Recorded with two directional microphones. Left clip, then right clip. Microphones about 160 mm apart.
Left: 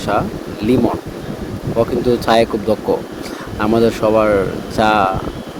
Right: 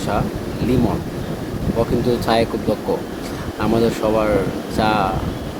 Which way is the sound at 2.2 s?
40° left (ahead or behind).